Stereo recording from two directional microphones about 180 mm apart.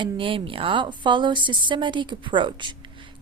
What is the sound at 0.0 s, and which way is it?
A woman's voice, 30° right (ahead or behind).